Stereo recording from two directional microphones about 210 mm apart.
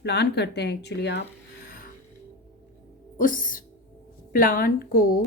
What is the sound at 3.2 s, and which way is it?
Speech, 40° left (ahead or behind).